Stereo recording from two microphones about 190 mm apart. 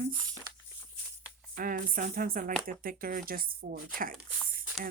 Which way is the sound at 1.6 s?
50° right (ahead or behind).